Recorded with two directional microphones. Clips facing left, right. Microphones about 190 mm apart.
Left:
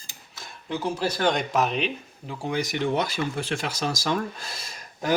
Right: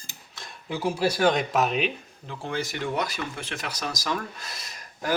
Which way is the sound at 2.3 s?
10° left (ahead or behind).